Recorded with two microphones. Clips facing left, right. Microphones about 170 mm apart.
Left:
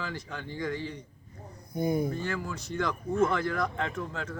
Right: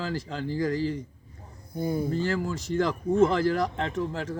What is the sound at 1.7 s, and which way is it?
Speech, 15° left (ahead or behind).